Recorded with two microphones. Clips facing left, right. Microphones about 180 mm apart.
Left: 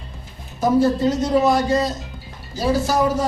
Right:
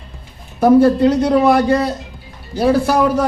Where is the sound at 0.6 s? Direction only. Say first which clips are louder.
Right 7 dB; 60° right (ahead or behind).